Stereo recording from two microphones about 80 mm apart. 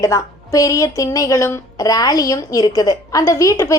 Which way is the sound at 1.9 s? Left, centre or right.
Left.